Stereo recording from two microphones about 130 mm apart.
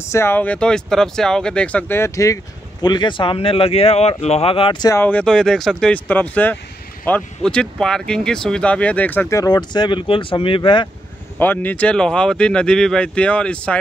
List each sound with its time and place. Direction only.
0.1 s speech: 20° left (ahead or behind)
2.8 s speech: 35° left (ahead or behind)
5.0 s speech: 10° left (ahead or behind)
9.4 s speech: 35° left (ahead or behind)
11.3 s speech: 15° left (ahead or behind)